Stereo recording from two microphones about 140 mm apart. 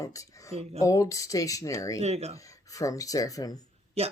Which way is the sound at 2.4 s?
25° left (ahead or behind).